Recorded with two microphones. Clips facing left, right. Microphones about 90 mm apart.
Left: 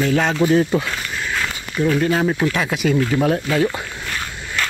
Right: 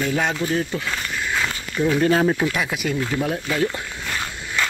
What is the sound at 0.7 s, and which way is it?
Speech, 20° left (ahead or behind).